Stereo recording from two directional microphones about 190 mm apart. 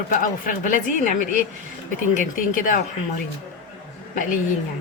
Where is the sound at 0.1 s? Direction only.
45° left (ahead or behind).